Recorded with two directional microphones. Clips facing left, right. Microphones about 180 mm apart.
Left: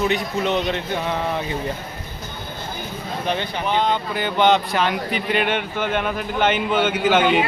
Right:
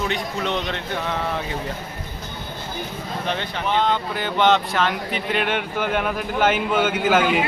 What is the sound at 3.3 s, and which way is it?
Speech, centre (ahead or behind).